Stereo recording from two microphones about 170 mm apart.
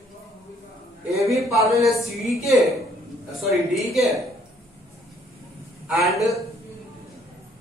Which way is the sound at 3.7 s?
Centre (ahead or behind).